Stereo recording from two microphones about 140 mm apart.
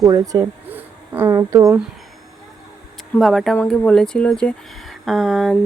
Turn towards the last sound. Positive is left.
turn(degrees=0)  # may be behind; listen again after turning